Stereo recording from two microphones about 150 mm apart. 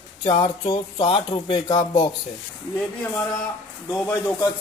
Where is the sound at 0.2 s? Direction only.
35° left (ahead or behind).